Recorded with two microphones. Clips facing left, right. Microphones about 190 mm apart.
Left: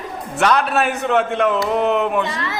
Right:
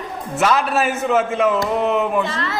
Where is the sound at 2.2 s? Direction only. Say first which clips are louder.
Right 1 dB; 20° left (ahead or behind).